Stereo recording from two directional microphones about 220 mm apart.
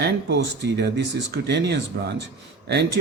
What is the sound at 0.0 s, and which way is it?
Speech, 50° right (ahead or behind).